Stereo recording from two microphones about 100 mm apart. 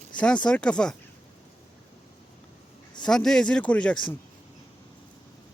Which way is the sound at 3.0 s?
5° left (ahead or behind).